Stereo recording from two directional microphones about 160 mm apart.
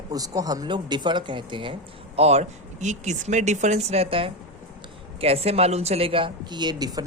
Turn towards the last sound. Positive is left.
turn(degrees=-25)  # may be behind; listen again after turning